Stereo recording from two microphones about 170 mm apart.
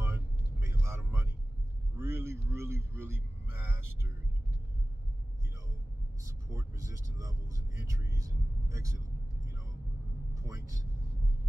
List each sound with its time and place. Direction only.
0.0 s vehicle: 15° right (ahead or behind)
6.5 s vehicle: 20° right (ahead or behind)